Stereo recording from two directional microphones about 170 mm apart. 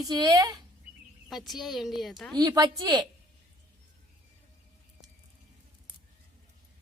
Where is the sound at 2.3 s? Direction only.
20° right (ahead or behind).